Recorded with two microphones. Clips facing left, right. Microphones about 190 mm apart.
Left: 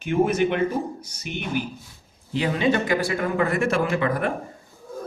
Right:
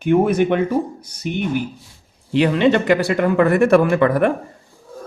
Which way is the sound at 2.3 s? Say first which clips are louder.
Right 7 dB; 70° right (ahead or behind).